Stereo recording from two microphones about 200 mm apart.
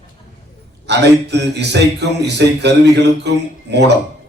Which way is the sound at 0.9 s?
60° right (ahead or behind).